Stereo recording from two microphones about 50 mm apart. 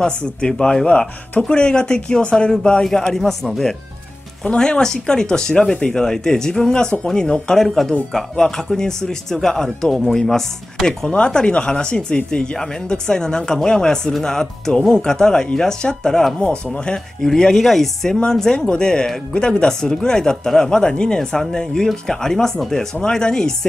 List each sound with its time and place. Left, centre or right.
0.0 s speech: centre
7.5 s speech: centre
10.9 s speech: centre